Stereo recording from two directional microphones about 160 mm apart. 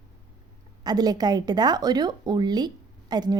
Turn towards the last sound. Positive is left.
turn(degrees=-25)  # may be behind; listen again after turning